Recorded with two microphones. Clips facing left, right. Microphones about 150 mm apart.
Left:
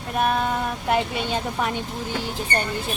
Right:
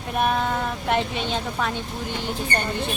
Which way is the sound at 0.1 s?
Centre (ahead or behind).